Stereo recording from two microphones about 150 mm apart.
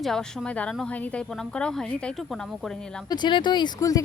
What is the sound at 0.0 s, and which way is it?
A woman's voice, centre (ahead or behind).